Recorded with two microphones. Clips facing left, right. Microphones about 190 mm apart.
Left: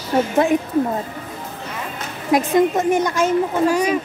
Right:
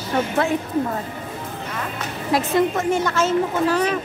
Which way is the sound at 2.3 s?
15° left (ahead or behind).